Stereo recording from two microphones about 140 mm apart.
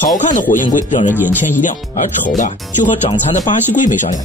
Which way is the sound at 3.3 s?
65° left (ahead or behind).